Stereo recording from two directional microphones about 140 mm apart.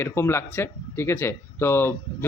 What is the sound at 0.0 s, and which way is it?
A man's voice, 20° left (ahead or behind).